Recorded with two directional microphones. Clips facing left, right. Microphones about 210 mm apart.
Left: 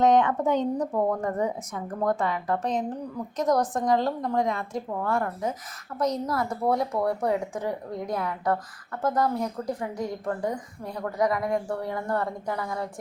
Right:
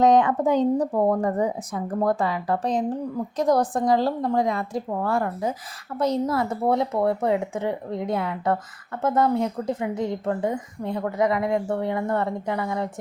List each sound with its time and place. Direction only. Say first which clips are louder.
0.0 s speech: right 3 dB; 35° right (ahead or behind)